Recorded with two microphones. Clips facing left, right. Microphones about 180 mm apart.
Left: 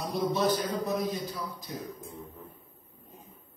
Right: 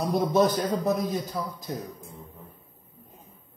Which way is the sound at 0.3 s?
45° right (ahead or behind).